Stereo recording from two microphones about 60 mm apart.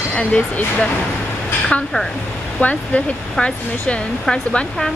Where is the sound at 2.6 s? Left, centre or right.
Centre.